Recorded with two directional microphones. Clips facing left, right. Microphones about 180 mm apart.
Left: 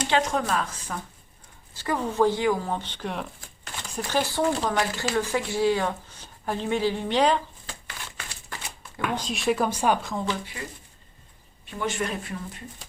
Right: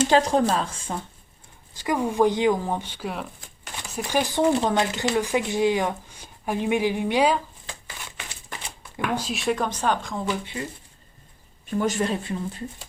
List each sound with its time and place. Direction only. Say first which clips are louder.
0.1 s speech: right 5 dB; 35° right (ahead or behind)
1.7 s speech: right 3 dB; 15° right (ahead or behind)
9.1 s speech: left 1 dB; 5° right (ahead or behind)
11.8 s speech: right 4 dB; 35° right (ahead or behind)